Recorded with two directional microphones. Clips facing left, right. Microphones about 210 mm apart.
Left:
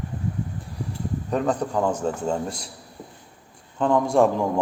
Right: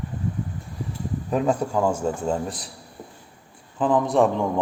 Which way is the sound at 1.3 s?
5° right (ahead or behind).